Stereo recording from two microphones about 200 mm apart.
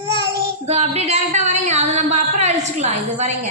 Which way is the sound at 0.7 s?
30° right (ahead or behind).